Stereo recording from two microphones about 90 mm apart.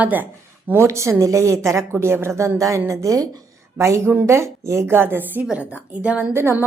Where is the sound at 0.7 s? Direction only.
30° right (ahead or behind); by 6.3 s 15° right (ahead or behind).